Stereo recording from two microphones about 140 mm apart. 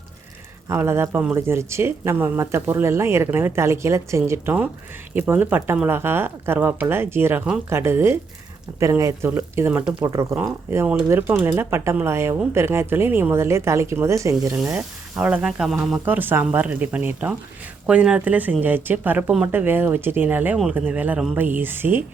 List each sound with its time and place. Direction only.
0.7 s speech: 15° right (ahead or behind)
9.8 s speech: 25° right (ahead or behind)
14.8 s speech: 10° right (ahead or behind)